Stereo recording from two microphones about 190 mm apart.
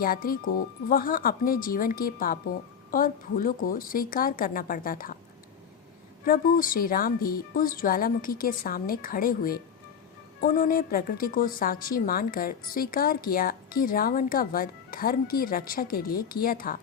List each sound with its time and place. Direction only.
0.0 s a woman's voice: 50° left (ahead or behind)
6.2 s a woman's voice: 50° left (ahead or behind)